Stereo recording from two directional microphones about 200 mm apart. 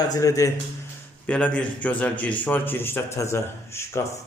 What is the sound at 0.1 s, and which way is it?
Speech, 15° left (ahead or behind).